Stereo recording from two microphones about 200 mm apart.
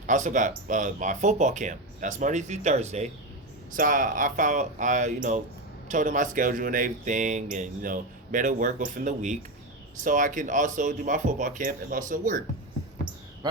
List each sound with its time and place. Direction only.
0.0 s speech: 40° right (ahead or behind)